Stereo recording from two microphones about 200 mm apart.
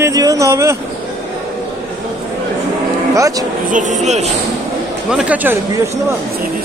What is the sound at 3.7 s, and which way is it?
Speech, 40° right (ahead or behind).